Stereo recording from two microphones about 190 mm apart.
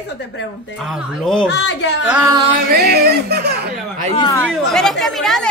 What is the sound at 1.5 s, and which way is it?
Speech, 65° left (ahead or behind).